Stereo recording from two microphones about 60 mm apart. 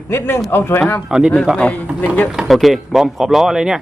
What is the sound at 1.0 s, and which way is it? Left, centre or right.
Speech, centre.